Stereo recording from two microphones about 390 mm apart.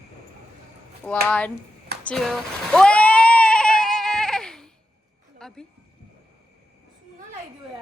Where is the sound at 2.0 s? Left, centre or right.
Centre.